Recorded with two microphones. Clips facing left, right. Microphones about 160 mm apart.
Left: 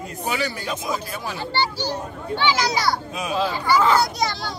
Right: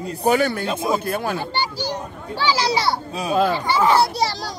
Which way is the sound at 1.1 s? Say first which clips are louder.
Right 7 dB; 55° right (ahead or behind).